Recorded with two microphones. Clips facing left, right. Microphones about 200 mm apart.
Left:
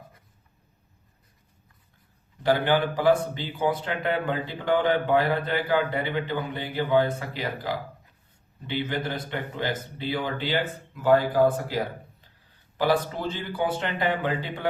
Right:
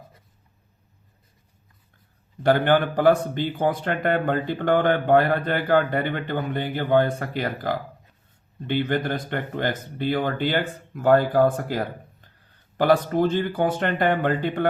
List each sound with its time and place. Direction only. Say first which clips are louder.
2.4 s speech: right 3 dB; 55° right (ahead or behind)